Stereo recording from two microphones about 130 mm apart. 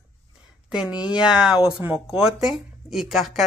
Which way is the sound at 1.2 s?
5° right (ahead or behind).